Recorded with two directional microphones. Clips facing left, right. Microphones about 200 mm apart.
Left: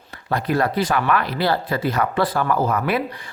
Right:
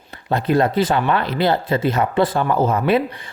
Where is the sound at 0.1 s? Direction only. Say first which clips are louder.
Right 4 dB; 25° right (ahead or behind).